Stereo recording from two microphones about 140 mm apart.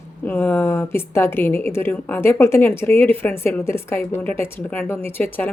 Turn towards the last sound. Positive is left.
turn(degrees=15)  # may be behind; listen again after turning